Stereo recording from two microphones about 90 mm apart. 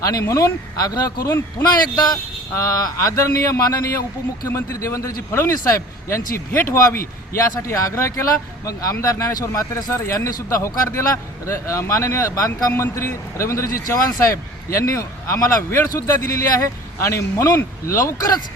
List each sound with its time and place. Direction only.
0.0 s a man's voice: 40° left (ahead or behind)
1.3 s speech: 30° left (ahead or behind)
1.6 s a man's voice: 50° left (ahead or behind)
2.6 s a man's voice: 35° left (ahead or behind)